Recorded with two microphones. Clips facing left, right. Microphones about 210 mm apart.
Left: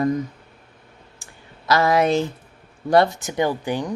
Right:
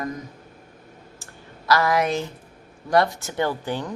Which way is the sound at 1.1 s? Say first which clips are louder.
Right 3 dB; 20° left (ahead or behind).